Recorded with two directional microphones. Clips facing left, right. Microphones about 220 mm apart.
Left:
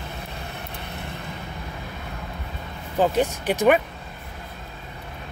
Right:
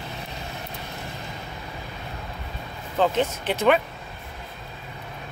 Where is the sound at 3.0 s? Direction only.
15° left (ahead or behind).